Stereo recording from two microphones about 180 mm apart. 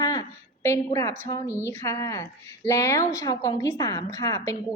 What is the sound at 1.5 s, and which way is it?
A woman's voice, 15° left (ahead or behind).